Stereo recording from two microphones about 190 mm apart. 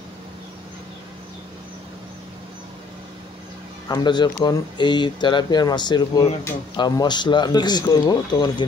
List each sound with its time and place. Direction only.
3.9 s speech: 25° left (ahead or behind)